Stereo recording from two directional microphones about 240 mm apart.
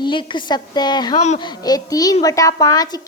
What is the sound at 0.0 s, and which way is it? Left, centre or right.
A child's voice, centre.